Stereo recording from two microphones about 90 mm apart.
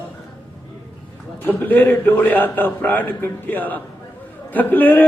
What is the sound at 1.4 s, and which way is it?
Speech, 20° left (ahead or behind).